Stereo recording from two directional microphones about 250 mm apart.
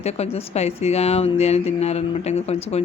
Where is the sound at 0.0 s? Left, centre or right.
Left.